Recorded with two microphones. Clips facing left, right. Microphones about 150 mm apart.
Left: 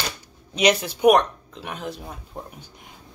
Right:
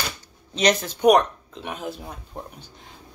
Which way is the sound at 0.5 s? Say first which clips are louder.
Left 1 dB; 10° left (ahead or behind).